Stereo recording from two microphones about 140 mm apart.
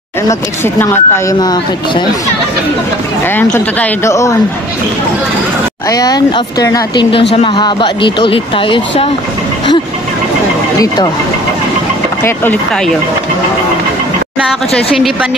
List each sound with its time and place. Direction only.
0.3 s speech: 20° left (ahead or behind)
1.4 s speech: 30° left (ahead or behind)
3.3 s speech: 10° left (ahead or behind)
5.9 s speech: 25° left (ahead or behind)
7.1 s speech: 40° left (ahead or behind)